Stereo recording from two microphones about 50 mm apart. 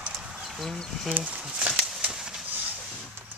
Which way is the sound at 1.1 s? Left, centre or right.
Right.